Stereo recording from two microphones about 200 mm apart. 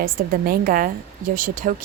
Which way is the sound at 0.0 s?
45° right (ahead or behind).